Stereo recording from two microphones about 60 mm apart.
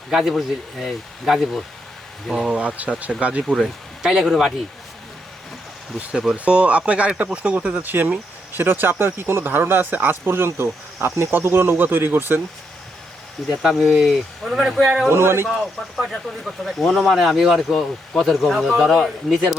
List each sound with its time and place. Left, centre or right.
0.1 s speech: centre
2.4 s speech: centre
4.0 s speech: centre
6.1 s speech: centre; by 12.4 s right
13.5 s speech: centre
14.8 s speech: centre
15.1 s speech: right
15.4 s speech: centre